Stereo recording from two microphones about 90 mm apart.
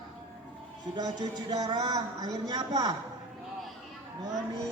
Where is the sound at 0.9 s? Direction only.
45° right (ahead or behind).